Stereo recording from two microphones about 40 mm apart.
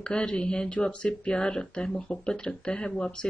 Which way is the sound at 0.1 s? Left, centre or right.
Left.